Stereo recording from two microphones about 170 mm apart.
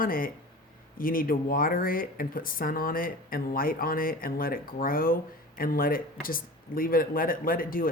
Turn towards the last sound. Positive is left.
turn(degrees=55)  # may be behind; listen again after turning